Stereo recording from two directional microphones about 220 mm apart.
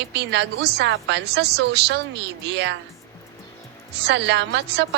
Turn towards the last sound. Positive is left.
turn(degrees=-50)  # may be behind; listen again after turning